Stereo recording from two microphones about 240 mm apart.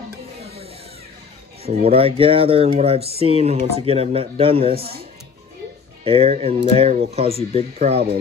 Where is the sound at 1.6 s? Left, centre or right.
Right.